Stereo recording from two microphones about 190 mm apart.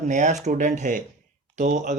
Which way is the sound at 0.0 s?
40° right (ahead or behind).